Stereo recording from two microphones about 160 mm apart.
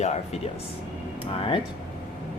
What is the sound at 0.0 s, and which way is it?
Speech, 45° left (ahead or behind).